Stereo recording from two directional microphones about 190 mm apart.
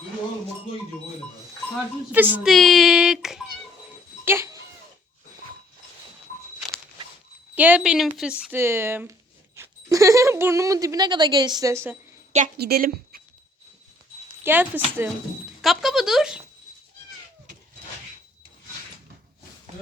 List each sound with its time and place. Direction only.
2.1 s a child's voice: 10° right (ahead or behind)
4.3 s goat: 15° right (ahead or behind)
7.5 s speech: 10° right (ahead or behind)
12.5 s a woman's voice: 55° right (ahead or behind)
14.4 s speech: 10° right (ahead or behind)
15.6 s a sound: centre (ahead or behind)